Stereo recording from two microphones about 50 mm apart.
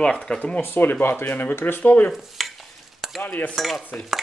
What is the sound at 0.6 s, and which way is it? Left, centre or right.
Speech, left.